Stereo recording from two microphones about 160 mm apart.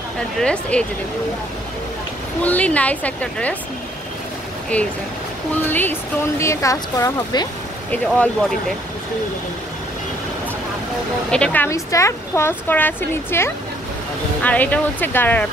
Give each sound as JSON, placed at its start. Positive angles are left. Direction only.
{"t": 0.4, "sound": "speech", "side_deg": 5}
{"t": 2.4, "sound": "speech", "side_deg": 10}
{"t": 4.7, "sound": "speech", "side_deg": 10}
{"t": 7.9, "sound": "speech", "side_deg": 5}
{"t": 11.2, "sound": "speech", "side_deg": 5}